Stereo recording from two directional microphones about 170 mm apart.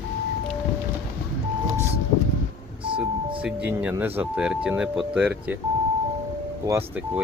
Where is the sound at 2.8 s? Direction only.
30° right (ahead or behind).